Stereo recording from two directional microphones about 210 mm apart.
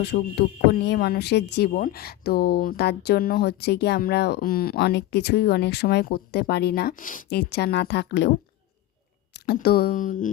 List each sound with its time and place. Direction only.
0.0 s speech: 50° left (ahead or behind)